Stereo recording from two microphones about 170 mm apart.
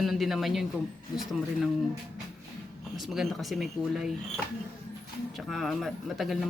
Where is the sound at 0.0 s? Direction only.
Centre (ahead or behind).